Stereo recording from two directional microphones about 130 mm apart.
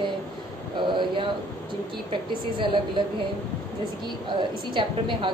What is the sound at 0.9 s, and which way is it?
A woman's voice, 40° right (ahead or behind).